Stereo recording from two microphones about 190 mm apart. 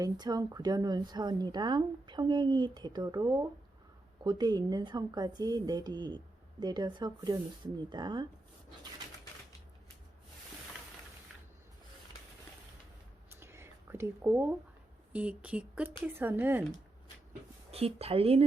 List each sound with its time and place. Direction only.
0.0 s a woman's voice: 20° right (ahead or behind)
13.3 s whispering: 15° right (ahead or behind)
15.1 s speech: 5° right (ahead or behind)
17.7 s a woman's voice: 30° right (ahead or behind)